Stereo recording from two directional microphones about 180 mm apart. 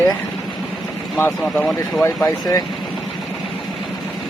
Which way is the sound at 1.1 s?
5° left (ahead or behind).